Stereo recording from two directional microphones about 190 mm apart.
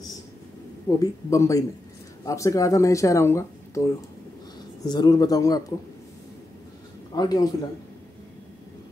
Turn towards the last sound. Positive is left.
turn(degrees=20)  # may be behind; listen again after turning